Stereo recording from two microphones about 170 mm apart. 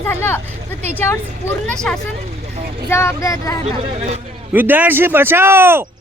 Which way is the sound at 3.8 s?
35° right (ahead or behind).